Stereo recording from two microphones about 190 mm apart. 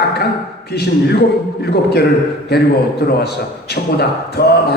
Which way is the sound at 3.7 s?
55° left (ahead or behind).